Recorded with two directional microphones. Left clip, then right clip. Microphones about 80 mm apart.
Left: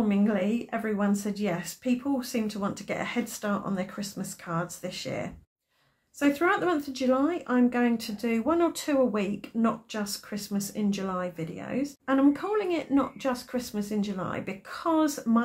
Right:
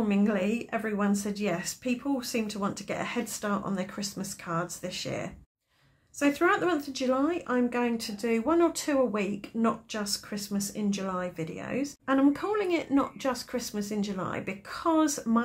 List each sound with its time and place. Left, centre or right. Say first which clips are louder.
0.0 s speech: left 1 dB; right
9.9 s speech: right 1 dB; right
10.3 s speech: left 1 dB; right